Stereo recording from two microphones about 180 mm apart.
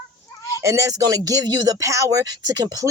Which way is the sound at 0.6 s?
20° right (ahead or behind).